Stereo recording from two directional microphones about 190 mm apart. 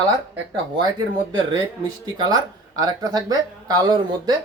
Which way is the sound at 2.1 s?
20° right (ahead or behind).